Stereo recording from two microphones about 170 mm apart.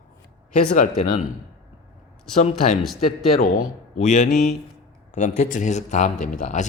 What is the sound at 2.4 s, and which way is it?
Speech, 40° left (ahead or behind).